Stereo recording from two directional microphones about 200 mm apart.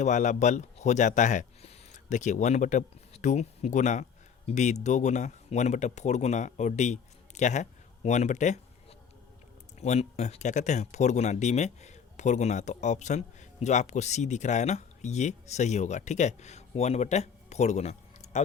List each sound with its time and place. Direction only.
0.0 s speech: 35° left (ahead or behind)